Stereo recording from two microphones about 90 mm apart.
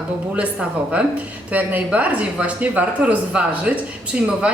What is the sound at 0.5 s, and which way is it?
Speech, 10° right (ahead or behind).